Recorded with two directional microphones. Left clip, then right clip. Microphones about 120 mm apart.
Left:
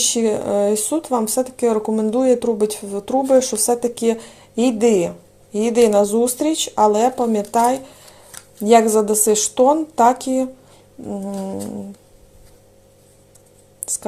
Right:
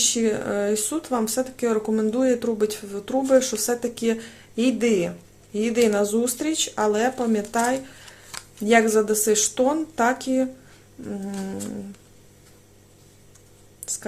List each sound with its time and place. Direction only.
0.0 s speech: 25° left (ahead or behind)
11.3 s cat: 5° left (ahead or behind)